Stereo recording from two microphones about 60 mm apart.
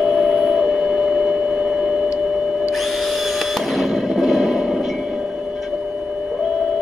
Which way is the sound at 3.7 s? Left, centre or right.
Centre.